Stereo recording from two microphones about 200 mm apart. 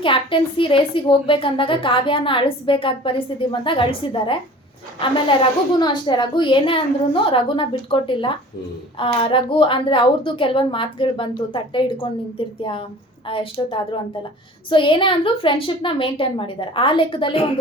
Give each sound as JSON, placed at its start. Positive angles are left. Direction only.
{"t": 0.0, "sound": "a woman's voice", "side_deg": 25}